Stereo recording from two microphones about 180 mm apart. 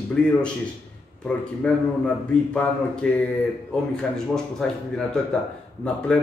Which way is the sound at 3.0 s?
5° left (ahead or behind).